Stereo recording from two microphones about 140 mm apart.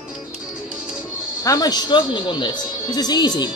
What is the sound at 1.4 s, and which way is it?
Speech, 25° left (ahead or behind).